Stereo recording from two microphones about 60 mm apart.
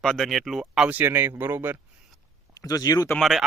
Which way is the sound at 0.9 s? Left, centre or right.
Right.